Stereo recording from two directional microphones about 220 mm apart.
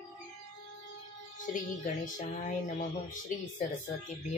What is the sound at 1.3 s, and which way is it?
Music, 35° left (ahead or behind).